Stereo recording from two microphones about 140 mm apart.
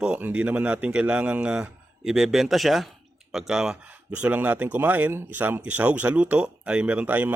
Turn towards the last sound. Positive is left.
turn(degrees=-10)  # may be behind; listen again after turning